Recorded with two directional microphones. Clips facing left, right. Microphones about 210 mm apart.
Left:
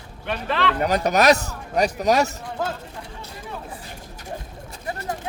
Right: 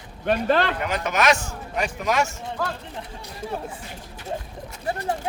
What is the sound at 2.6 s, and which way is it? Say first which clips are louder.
Speech: left 2 dB; 20° left (ahead or behind).